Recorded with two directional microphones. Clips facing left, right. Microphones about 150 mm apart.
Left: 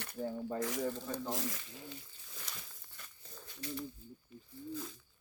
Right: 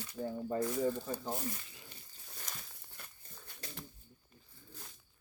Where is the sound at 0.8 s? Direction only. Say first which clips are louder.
Right 3 dB; 10° right (ahead or behind).